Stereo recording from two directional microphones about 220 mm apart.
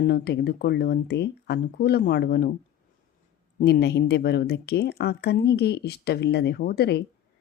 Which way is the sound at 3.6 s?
45° left (ahead or behind).